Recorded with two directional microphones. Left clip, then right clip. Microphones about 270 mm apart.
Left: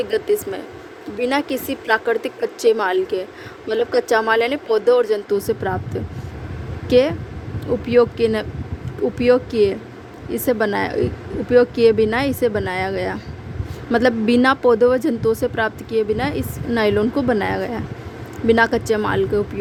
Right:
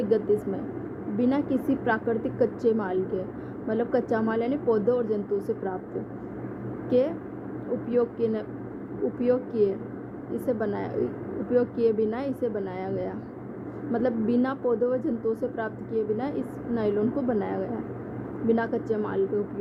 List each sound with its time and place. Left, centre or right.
0.0 s a woman's voice: left
6.9 s a woman's voice: left